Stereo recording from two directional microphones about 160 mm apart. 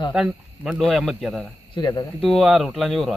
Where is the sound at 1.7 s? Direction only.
25° left (ahead or behind).